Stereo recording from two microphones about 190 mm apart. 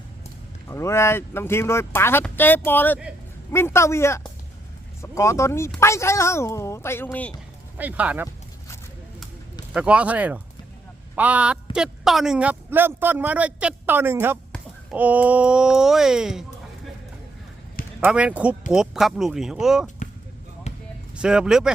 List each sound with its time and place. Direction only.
0.7 s speech: 15° left (ahead or behind)
7.8 s speech: 10° right (ahead or behind)
9.7 s speech: 5° right (ahead or behind)
18.0 s speech: 5° right (ahead or behind)
21.2 s speech: 5° right (ahead or behind)